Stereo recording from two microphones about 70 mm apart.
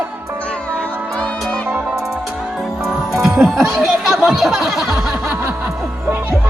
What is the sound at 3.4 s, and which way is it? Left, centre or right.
Speech, centre.